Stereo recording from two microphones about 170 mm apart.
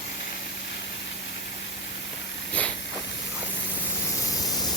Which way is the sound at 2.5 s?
5° left (ahead or behind).